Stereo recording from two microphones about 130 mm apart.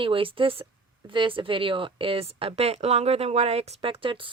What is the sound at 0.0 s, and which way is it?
Speech, 40° right (ahead or behind).